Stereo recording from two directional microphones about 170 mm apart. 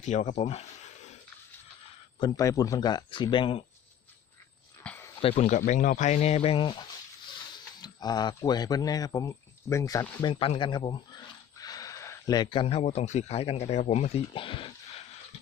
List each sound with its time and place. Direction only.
0.0 s speech: 45° left (ahead or behind)
2.2 s speech: 20° left (ahead or behind)
4.8 s a sound: 10° left (ahead or behind)
5.2 s speech: 40° left (ahead or behind)